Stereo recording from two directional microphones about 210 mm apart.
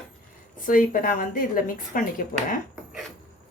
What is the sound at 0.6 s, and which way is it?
Speech, 40° left (ahead or behind).